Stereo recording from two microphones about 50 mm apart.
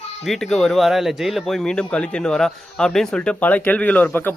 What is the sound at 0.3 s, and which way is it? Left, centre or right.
Speech, centre.